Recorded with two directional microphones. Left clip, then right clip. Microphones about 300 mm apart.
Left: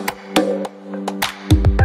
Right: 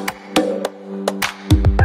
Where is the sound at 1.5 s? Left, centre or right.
Left.